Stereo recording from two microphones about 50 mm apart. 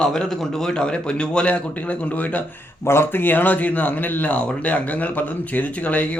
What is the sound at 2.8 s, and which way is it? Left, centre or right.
Speech, left.